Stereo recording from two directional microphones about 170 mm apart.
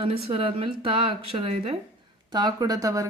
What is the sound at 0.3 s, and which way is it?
Speech, 30° right (ahead or behind).